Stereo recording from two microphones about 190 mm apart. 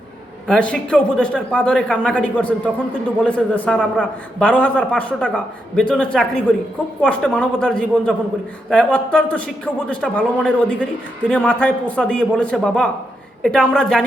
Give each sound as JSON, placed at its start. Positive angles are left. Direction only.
{"t": 0.4, "sound": "a man's voice", "side_deg": 5}